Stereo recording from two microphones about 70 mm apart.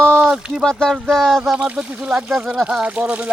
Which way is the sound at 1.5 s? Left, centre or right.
Centre.